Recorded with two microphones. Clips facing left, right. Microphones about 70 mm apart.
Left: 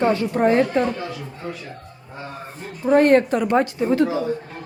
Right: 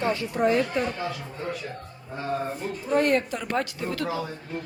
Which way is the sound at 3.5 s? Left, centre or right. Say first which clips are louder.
Left 9 dB; left.